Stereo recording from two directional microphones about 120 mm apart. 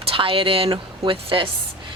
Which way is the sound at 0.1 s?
50° right (ahead or behind).